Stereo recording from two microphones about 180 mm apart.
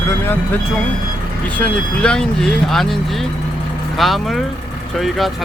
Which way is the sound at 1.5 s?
5° left (ahead or behind).